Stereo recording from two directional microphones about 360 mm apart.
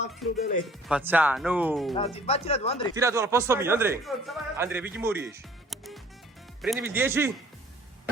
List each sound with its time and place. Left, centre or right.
0.2 s speech: centre
2.0 s speech: centre
2.9 s a man's voice: centre